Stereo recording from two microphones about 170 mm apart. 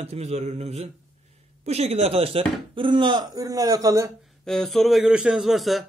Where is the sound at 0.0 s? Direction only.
40° right (ahead or behind); by 4.1 s 20° right (ahead or behind).